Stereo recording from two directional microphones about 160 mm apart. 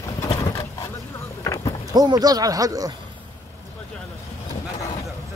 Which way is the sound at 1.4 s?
20° left (ahead or behind).